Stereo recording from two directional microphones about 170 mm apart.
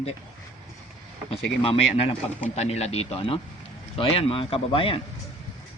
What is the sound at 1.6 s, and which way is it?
A man's voice, 30° left (ahead or behind).